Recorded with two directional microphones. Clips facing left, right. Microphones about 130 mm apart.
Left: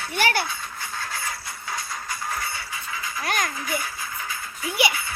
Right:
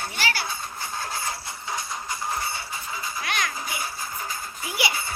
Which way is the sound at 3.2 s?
40° left (ahead or behind).